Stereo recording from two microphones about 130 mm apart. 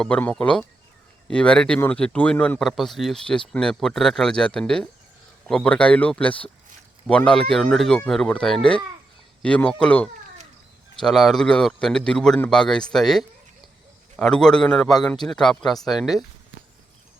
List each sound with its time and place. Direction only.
0.0 s speech: 10° left (ahead or behind)